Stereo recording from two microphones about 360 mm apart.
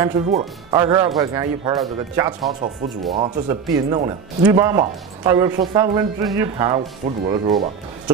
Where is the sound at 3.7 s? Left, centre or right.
Centre.